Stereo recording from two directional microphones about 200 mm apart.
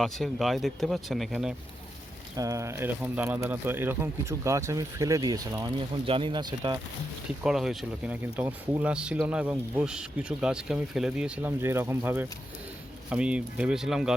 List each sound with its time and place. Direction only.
0.0 s speech: centre (ahead or behind)
2.3 s speech: 15° right (ahead or behind)
7.4 s speech: centre (ahead or behind)